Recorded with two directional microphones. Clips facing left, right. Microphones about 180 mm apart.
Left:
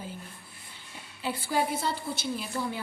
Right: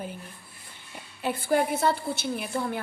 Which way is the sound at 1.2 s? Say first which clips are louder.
Right 4 dB; 55° right (ahead or behind).